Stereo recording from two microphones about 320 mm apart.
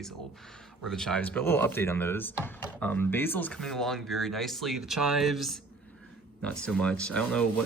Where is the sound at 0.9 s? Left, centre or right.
Centre.